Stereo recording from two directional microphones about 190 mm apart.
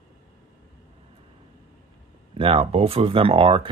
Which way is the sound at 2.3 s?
30° right (ahead or behind).